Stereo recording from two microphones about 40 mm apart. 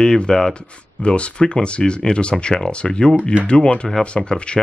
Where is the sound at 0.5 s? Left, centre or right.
Left.